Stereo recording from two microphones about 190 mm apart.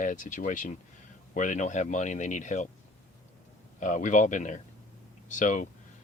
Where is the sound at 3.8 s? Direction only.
40° left (ahead or behind).